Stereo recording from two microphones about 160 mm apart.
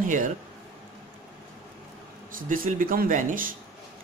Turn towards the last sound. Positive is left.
turn(degrees=-60)  # may be behind; listen again after turning